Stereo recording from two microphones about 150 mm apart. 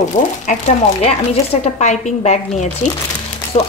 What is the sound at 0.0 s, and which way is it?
Speech, 50° left (ahead or behind).